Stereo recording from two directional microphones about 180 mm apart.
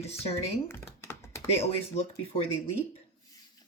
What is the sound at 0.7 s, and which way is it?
Computer keyboard, 15° left (ahead or behind).